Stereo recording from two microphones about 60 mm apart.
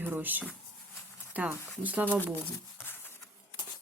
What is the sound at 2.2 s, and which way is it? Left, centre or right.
Speech, left.